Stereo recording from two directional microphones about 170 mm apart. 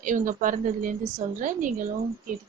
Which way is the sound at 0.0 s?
50° right (ahead or behind).